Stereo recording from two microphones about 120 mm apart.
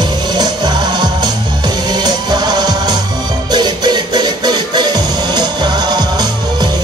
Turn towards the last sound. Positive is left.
turn(degrees=-35)  # may be behind; listen again after turning